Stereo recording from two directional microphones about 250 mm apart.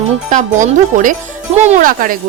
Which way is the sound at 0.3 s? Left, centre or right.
Right.